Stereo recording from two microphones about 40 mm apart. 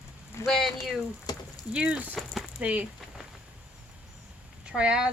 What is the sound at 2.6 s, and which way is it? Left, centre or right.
Speech, right.